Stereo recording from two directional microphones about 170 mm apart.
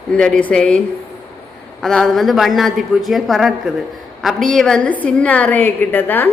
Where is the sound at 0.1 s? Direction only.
5° left (ahead or behind).